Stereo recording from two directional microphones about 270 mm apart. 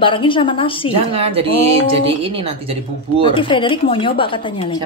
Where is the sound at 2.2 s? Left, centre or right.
Right.